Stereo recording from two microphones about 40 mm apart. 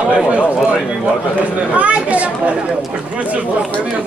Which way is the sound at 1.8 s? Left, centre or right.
Right.